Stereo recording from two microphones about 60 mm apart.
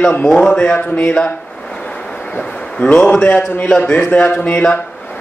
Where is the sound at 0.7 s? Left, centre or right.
Left.